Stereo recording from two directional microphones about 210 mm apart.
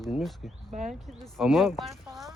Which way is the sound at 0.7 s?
35° right (ahead or behind).